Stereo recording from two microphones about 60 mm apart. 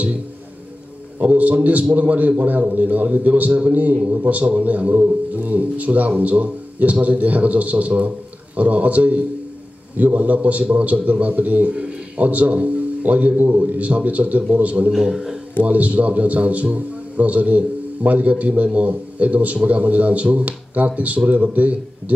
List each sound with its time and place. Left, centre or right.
1.2 s a man's voice: right
14.9 s a man's voice: centre
15.6 s a man's voice: right